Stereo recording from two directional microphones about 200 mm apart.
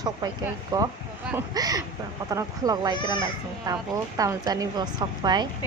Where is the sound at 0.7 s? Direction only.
15° right (ahead or behind).